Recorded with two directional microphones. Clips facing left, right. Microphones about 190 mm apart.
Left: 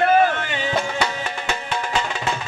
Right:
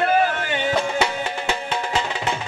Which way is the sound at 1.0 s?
25° right (ahead or behind).